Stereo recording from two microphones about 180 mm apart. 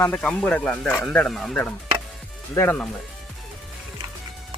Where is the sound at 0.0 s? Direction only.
5° left (ahead or behind).